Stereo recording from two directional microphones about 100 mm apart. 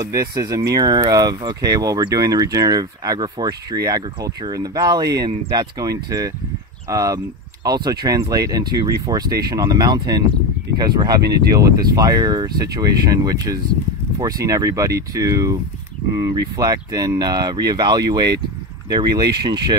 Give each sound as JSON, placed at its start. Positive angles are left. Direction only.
{"t": 0.0, "sound": "speech", "side_deg": -35}